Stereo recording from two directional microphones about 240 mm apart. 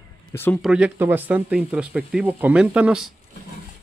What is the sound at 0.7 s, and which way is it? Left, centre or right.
Speech, centre.